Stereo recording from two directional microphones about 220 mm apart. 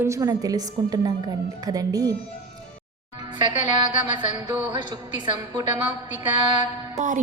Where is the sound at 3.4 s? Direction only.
20° right (ahead or behind).